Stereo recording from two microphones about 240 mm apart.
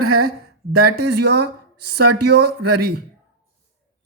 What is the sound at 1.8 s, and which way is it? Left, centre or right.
Speech, right.